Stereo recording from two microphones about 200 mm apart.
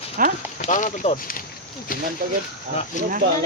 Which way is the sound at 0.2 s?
45° right (ahead or behind).